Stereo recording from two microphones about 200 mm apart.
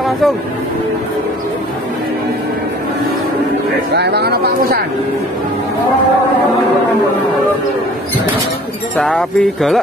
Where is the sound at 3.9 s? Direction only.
55° right (ahead or behind).